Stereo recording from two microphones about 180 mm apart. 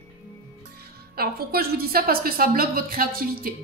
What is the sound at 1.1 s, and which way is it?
A woman's voice, 60° right (ahead or behind).